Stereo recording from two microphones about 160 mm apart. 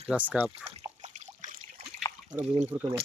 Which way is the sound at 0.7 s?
40° right (ahead or behind).